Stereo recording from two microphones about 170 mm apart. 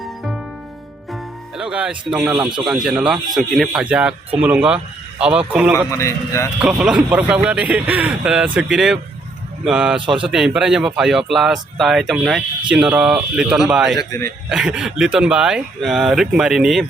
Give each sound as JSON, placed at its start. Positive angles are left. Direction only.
{"t": 1.5, "sound": "a man's voice", "side_deg": -5}
{"t": 6.0, "sound": "a man's voice", "side_deg": 15}
{"t": 6.6, "sound": "a man's voice", "side_deg": -5}
{"t": 14.0, "sound": "speech", "side_deg": 20}
{"t": 14.5, "sound": "a man's voice", "side_deg": -5}